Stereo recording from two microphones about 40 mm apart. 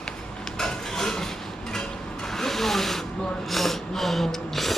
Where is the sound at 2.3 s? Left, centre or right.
Centre.